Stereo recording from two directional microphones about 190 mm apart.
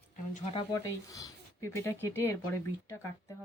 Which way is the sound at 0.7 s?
15° left (ahead or behind).